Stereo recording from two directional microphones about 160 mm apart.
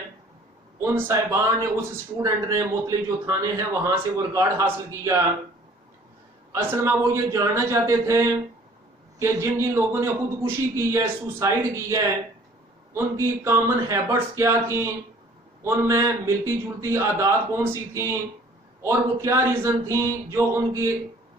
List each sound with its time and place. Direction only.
0.7 s a man's voice: 15° right (ahead or behind)
6.5 s a man's voice: 15° right (ahead or behind)